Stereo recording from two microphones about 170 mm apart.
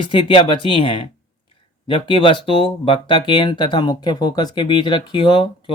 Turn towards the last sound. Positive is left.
turn(degrees=30)  # may be behind; listen again after turning